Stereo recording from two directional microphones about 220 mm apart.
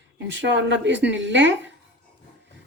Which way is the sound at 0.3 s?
55° right (ahead or behind).